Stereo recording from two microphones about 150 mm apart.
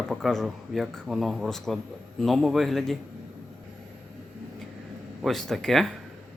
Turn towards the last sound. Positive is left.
turn(degrees=0)  # may be behind; listen again after turning